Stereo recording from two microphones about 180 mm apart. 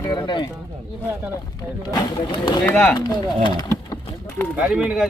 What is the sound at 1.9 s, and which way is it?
Speech, 25° left (ahead or behind).